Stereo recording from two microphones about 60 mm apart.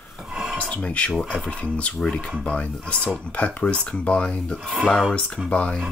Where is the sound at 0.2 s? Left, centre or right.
Centre.